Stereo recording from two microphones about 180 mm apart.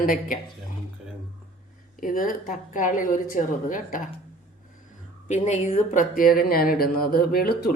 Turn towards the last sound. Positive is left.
turn(degrees=55)  # may be behind; listen again after turning